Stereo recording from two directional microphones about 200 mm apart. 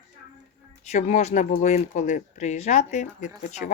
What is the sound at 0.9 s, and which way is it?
Speech, 35° left (ahead or behind).